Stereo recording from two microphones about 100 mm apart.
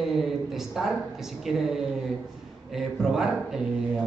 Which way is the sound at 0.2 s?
Centre (ahead or behind).